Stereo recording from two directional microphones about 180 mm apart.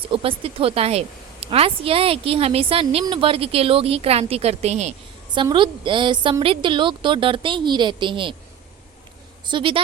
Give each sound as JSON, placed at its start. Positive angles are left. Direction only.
{"t": 0.1, "sound": "a woman's voice", "side_deg": -30}
{"t": 5.3, "sound": "a woman's voice", "side_deg": -25}
{"t": 9.5, "sound": "a woman's voice", "side_deg": -30}